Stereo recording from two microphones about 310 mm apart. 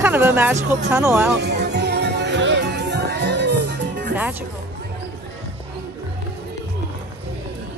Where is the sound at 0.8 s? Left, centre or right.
Centre.